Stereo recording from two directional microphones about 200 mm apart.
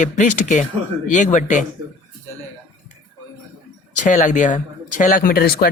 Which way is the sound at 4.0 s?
40° left (ahead or behind).